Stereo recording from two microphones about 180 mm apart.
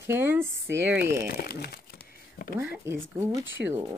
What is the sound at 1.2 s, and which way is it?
Crumpling, 60° left (ahead or behind).